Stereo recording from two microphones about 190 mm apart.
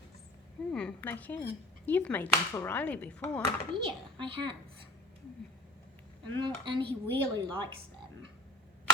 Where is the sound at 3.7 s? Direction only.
25° right (ahead or behind).